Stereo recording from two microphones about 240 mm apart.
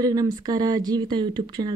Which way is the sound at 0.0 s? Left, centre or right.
Centre.